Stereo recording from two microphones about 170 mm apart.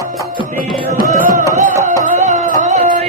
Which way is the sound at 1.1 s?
50° right (ahead or behind).